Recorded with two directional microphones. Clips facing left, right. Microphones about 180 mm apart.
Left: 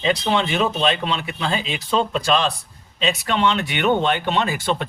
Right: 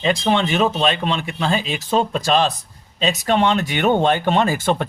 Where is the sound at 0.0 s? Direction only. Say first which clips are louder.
Right 2 dB; 45° right (ahead or behind).